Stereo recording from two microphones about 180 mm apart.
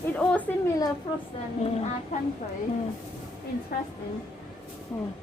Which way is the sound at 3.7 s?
60° left (ahead or behind).